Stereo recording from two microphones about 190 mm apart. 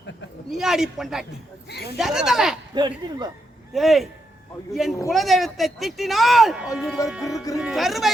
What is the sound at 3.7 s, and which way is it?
Speech, centre (ahead or behind).